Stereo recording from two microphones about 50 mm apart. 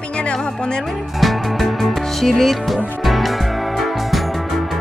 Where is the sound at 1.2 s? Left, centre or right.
Centre.